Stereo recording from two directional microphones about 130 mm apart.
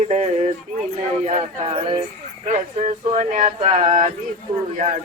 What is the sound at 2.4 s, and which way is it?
Speech, 65° right (ahead or behind).